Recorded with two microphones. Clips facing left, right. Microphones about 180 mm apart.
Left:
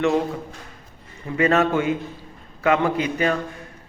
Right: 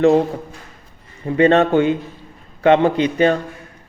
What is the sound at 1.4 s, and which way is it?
A man's voice, 30° right (ahead or behind).